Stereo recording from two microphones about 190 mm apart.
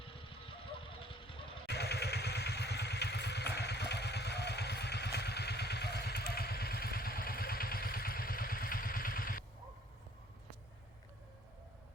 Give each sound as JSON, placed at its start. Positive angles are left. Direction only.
{"t": 0.0, "sound": "vehicle", "side_deg": 30}
{"t": 1.6, "sound": "vehicle", "side_deg": 60}